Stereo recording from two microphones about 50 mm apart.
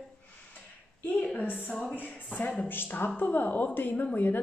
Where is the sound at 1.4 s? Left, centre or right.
Left.